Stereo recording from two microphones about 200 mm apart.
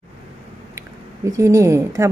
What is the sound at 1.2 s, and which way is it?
Speech, 15° right (ahead or behind).